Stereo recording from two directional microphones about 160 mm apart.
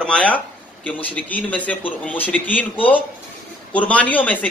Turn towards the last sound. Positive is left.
turn(degrees=10)  # may be behind; listen again after turning